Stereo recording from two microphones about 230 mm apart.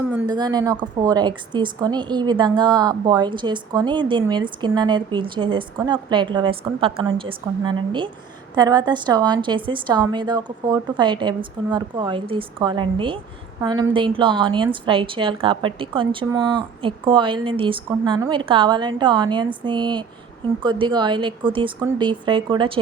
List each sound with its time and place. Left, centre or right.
0.1 s a woman's voice: centre